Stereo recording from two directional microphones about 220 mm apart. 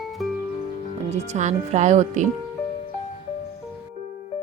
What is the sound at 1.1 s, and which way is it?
Speech, 30° right (ahead or behind).